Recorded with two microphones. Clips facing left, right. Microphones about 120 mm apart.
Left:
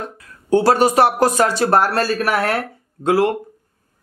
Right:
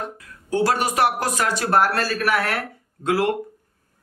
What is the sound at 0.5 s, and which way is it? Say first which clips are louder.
Speech: left 7 dB; 30° left (ahead or behind).